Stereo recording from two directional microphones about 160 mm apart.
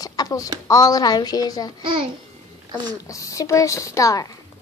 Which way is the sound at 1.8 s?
30° right (ahead or behind).